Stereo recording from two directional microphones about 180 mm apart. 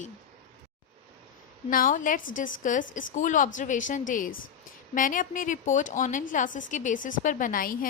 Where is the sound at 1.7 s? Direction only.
50° left (ahead or behind).